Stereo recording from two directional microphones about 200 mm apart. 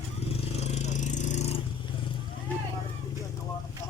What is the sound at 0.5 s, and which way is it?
Vehicle, 35° left (ahead or behind).